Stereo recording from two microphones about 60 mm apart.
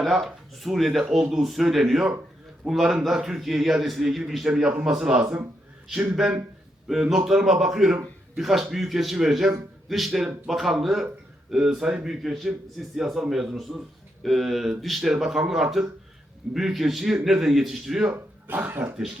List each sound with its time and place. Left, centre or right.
0.0 s a man's voice: centre
18.1 s speech: right